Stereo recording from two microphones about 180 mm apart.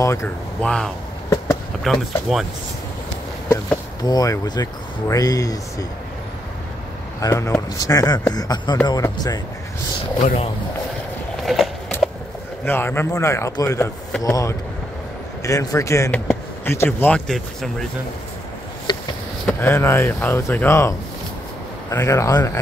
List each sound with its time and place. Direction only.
0.0 s speech: 15° left (ahead or behind); by 2.4 s centre (ahead or behind)
3.4 s speech: 15° left (ahead or behind)
7.2 s speech: 20° left (ahead or behind)
10.2 s speech: 40° left (ahead or behind)
11.4 s skateboard: centre (ahead or behind)
12.6 s speech: 10° left (ahead or behind)
18.9 s a sound: 25° left (ahead or behind)
19.4 s speech: 15° left (ahead or behind)
21.9 s speech: 15° left (ahead or behind)